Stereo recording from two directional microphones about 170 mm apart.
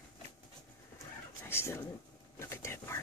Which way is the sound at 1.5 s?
15° left (ahead or behind).